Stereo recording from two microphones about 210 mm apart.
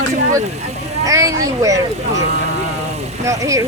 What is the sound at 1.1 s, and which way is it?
Speech, 15° right (ahead or behind).